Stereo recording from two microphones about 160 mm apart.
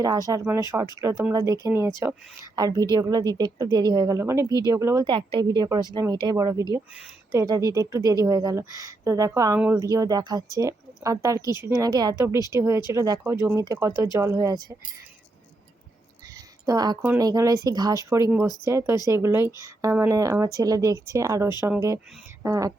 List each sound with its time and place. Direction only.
0.0 s a woman's voice: 25° right (ahead or behind)
5.0 s a woman's voice: 30° right (ahead or behind)
6.9 s speech: 5° right (ahead or behind)
7.3 s a woman's voice: 20° right (ahead or behind)
9.6 s speech: 10° right (ahead or behind)
9.9 s a woman's voice: 20° right (ahead or behind)
16.3 s a sound: 25° right (ahead or behind)
17.2 s a woman's voice: 20° right (ahead or behind)